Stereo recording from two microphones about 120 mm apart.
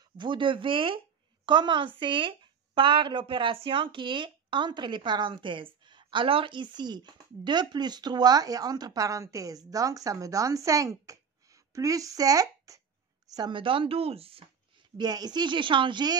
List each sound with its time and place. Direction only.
0.2 s a woman's voice: 45° right (ahead or behind)
15.0 s a woman's voice: 35° right (ahead or behind)